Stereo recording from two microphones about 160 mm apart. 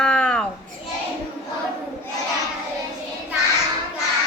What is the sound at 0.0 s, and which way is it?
Children playing, 5° left (ahead or behind).